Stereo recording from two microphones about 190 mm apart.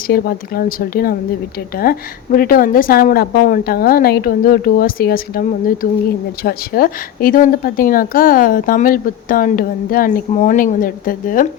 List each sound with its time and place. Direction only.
0.1 s a woman's voice: 50° left (ahead or behind)